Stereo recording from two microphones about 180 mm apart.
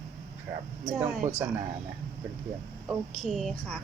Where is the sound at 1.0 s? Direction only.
45° right (ahead or behind).